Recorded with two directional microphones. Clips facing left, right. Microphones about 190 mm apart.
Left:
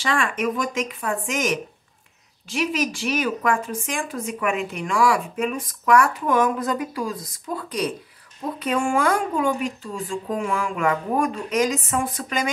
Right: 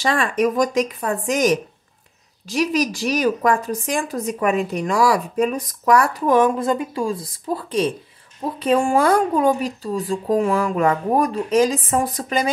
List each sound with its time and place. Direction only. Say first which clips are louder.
0.0 s a woman's voice: right 5 dB; 40° right (ahead or behind)